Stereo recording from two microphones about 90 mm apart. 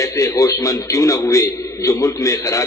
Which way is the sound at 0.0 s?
35° left (ahead or behind).